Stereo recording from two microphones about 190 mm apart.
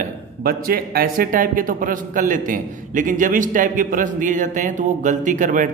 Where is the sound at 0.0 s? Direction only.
50° right (ahead or behind).